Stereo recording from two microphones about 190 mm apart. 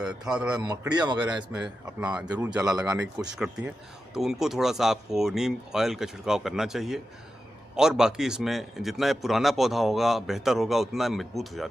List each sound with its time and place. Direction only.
0.0 s a man's voice: 5° right (ahead or behind)
0.6 s speech: 20° right (ahead or behind)
1.2 s a man's voice: 5° right (ahead or behind)